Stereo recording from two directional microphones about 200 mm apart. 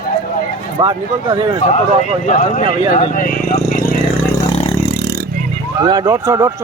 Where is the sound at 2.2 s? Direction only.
35° left (ahead or behind).